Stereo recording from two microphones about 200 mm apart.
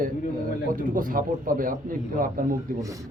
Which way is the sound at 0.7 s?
45° right (ahead or behind).